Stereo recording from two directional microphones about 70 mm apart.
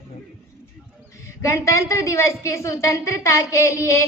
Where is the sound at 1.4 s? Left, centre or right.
Left.